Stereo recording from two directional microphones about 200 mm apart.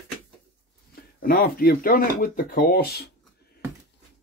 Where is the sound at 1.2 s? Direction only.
50° left (ahead or behind).